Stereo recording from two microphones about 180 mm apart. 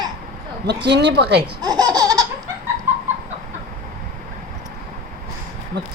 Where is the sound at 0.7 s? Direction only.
75° right (ahead or behind).